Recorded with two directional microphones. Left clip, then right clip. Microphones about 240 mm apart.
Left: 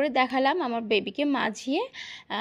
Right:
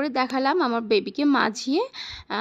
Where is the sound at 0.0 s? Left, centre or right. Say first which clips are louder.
Even; centre.